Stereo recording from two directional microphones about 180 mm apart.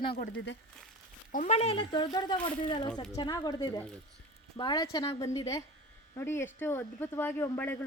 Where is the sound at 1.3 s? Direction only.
40° left (ahead or behind).